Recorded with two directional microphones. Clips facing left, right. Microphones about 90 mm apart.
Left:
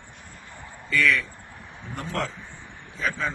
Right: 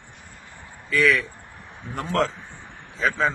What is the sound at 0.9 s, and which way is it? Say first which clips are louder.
Speech: right 3 dB; 60° right (ahead or behind).